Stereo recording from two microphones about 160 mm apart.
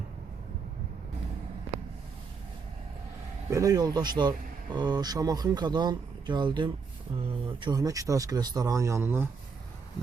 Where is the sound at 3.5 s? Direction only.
20° right (ahead or behind).